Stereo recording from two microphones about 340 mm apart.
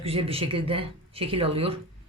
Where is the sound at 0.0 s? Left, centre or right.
Centre.